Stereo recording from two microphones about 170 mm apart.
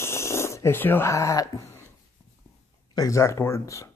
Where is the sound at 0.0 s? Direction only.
15° left (ahead or behind).